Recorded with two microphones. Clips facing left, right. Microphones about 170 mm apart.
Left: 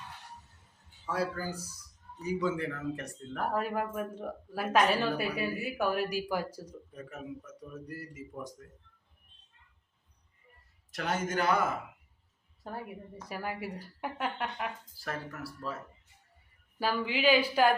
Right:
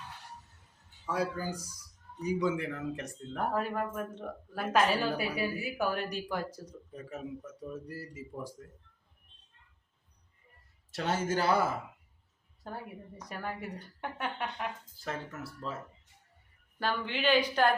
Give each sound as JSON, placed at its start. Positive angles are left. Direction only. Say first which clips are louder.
{"t": 1.0, "sound": "a man's voice", "louder": "even", "side_deg": -15}
{"t": 3.5, "sound": "a woman's voice", "louder": "left 2 dB", "side_deg": 5}
{"t": 6.9, "sound": "speech", "louder": "right 2 dB", "side_deg": -30}
{"t": 10.9, "sound": "speech", "louder": "right 1 dB", "side_deg": -30}
{"t": 13.2, "sound": "a woman's voice", "louder": "left 2 dB", "side_deg": 5}
{"t": 15.0, "sound": "speech", "louder": "even", "side_deg": -20}
{"t": 16.7, "sound": "a woman's voice", "louder": "left 2 dB", "side_deg": 5}